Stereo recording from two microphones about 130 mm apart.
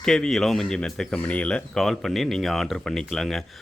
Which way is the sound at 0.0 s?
5° left (ahead or behind).